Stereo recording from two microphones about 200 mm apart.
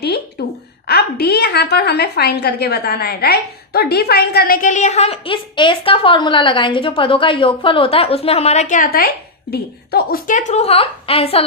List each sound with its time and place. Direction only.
0.9 s a woman's voice: 55° left (ahead or behind); by 11.4 s 30° left (ahead or behind)